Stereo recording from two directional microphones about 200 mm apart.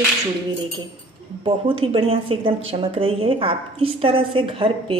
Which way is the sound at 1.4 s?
25° right (ahead or behind).